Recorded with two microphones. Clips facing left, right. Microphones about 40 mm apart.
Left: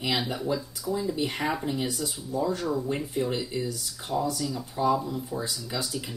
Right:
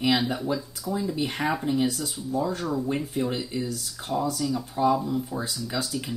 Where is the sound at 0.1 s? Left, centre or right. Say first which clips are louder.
Right 3 dB; centre.